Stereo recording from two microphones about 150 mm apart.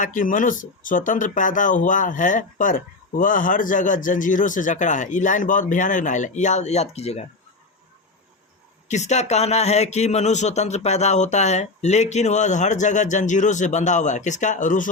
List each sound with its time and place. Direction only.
0.0 s speech: 60° left (ahead or behind); by 7.3 s 45° left (ahead or behind)
8.9 s speech: 50° left (ahead or behind)